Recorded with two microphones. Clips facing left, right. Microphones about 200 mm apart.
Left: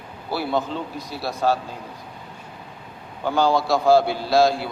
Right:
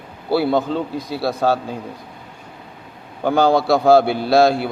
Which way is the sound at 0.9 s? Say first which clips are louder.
Right 6 dB; 65° right (ahead or behind).